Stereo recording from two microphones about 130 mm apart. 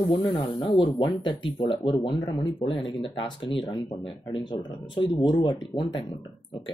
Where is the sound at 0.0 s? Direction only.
45° left (ahead or behind).